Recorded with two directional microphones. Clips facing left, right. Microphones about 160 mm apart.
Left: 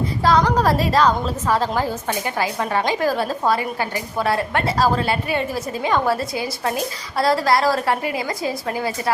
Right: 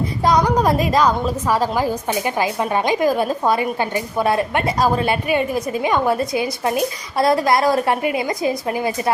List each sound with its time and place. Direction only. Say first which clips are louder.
0.2 s a woman's voice: right 1 dB; 15° right (ahead or behind)